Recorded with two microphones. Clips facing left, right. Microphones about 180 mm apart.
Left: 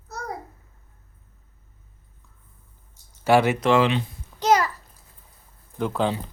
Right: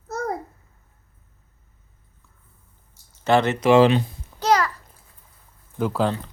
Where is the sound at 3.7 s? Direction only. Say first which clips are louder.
Right 9 dB; 40° right (ahead or behind).